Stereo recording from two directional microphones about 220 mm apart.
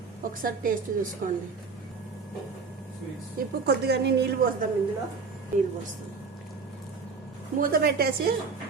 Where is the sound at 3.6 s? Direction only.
45° right (ahead or behind).